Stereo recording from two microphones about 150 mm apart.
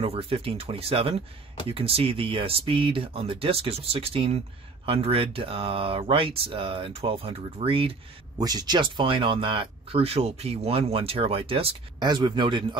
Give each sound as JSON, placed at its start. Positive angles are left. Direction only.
{"t": 0.0, "sound": "speech", "side_deg": -40}
{"t": 8.4, "sound": "speech", "side_deg": -25}